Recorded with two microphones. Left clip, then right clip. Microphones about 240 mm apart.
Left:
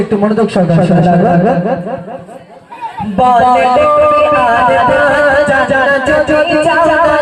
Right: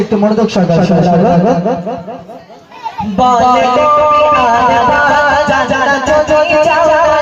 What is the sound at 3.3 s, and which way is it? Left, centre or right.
Music, left.